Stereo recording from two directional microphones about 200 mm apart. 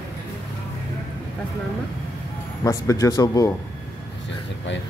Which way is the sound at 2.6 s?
15° left (ahead or behind).